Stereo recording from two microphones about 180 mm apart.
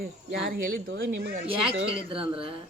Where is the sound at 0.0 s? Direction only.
70° right (ahead or behind); by 1.4 s 90° right.